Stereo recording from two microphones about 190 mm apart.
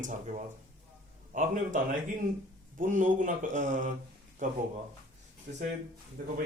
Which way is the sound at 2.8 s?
45° right (ahead or behind).